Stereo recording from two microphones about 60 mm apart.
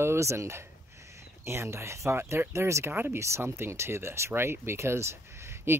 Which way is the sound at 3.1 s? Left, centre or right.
Right.